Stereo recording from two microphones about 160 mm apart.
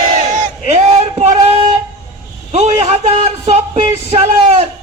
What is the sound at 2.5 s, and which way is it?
A man's voice, 40° right (ahead or behind).